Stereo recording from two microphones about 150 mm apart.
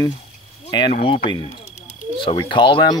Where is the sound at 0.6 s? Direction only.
30° left (ahead or behind).